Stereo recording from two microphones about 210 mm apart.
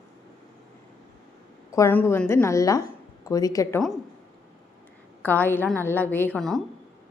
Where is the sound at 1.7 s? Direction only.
10° left (ahead or behind).